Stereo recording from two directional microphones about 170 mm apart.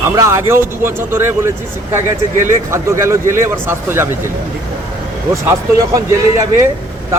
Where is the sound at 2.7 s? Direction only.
15° right (ahead or behind).